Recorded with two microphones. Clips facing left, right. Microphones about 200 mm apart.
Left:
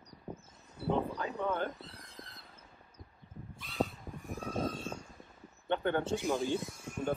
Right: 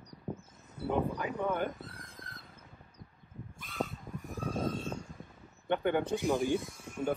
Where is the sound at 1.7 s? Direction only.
50° right (ahead or behind).